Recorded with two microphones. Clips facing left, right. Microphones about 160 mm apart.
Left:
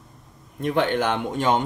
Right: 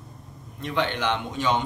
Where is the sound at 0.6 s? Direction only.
50° left (ahead or behind).